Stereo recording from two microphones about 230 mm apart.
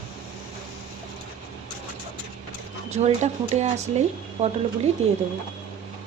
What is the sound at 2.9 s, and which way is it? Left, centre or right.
Speech, right.